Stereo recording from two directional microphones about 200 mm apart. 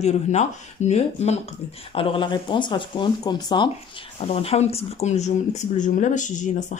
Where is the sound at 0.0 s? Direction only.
35° left (ahead or behind).